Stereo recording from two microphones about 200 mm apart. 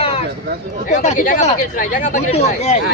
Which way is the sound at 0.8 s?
40° left (ahead or behind).